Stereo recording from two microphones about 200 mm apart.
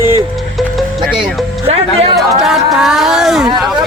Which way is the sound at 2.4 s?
Centre (ahead or behind).